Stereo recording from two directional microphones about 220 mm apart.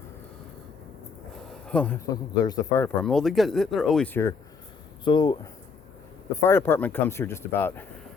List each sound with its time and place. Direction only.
1.6 s speech: 5° left (ahead or behind)
2.0 s speech: 15° left (ahead or behind)